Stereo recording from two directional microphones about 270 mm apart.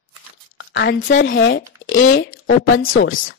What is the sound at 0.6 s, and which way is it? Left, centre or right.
A woman's voice, left.